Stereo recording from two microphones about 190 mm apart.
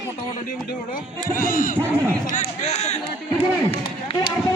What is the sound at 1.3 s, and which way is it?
Speech, 45° left (ahead or behind).